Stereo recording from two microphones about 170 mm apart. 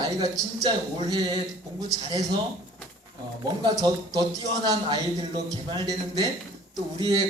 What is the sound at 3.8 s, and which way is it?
Speech, 25° right (ahead or behind).